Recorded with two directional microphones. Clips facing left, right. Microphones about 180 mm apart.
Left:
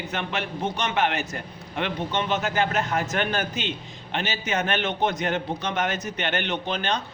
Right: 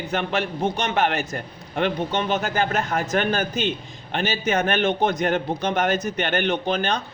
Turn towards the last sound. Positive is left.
turn(degrees=-40)  # may be behind; listen again after turning